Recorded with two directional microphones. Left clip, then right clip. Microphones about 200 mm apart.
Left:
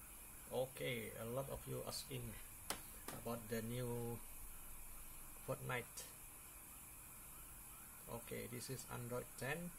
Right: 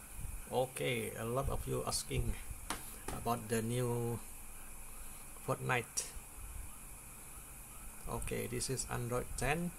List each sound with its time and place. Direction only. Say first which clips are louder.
0.5 s speech: right 8 dB; 30° right (ahead or behind)
3.3 s speech: right 10 dB; 30° right (ahead or behind)
5.5 s speech: right 10 dB; 30° right (ahead or behind)
8.1 s speech: right 9 dB; 30° right (ahead or behind)